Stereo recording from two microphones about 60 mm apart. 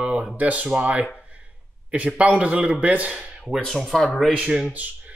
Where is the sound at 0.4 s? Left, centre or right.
Right.